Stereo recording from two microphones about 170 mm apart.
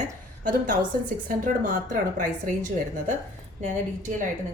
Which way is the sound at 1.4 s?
50° right (ahead or behind).